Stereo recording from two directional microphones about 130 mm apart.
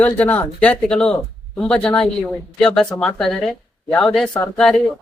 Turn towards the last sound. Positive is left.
turn(degrees=5)  # may be behind; listen again after turning